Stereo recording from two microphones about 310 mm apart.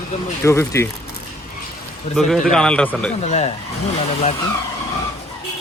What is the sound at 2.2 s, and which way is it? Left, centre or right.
Speech, centre.